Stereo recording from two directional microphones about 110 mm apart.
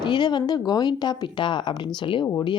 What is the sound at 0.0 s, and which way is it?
Speech, 45° left (ahead or behind).